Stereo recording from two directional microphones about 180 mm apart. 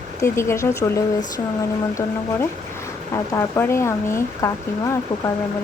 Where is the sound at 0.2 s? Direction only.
15° left (ahead or behind).